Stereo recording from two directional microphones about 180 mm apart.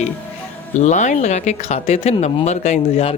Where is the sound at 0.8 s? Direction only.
40° left (ahead or behind).